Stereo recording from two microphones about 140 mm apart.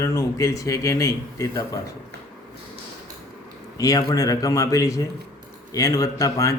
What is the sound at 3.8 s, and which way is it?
Speech, 25° left (ahead or behind).